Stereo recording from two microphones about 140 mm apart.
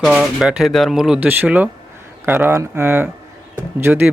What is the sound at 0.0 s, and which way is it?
A man's voice, centre (ahead or behind).